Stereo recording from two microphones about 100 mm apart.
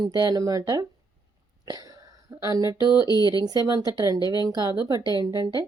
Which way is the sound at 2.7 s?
45° left (ahead or behind).